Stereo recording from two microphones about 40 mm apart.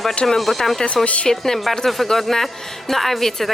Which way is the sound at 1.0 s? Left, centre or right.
Left.